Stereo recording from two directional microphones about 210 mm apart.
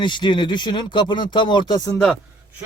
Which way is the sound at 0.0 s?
20° left (ahead or behind).